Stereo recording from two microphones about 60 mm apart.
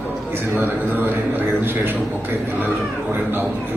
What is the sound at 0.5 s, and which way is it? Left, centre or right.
A man's voice, right.